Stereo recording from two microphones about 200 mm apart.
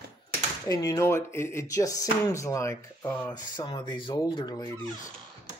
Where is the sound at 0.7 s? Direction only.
15° left (ahead or behind).